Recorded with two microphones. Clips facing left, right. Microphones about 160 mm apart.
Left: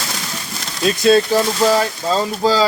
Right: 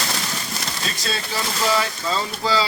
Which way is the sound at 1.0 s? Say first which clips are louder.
Left 15 dB; 50° left (ahead or behind).